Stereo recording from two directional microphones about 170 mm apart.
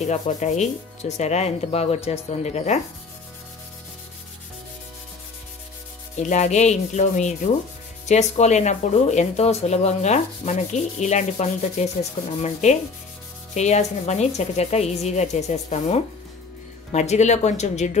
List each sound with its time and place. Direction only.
0.0 s speech: 45° left (ahead or behind)
6.2 s speech: 45° left (ahead or behind)